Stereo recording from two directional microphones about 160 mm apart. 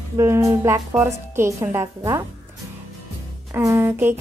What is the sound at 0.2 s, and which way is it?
Speech, 20° right (ahead or behind).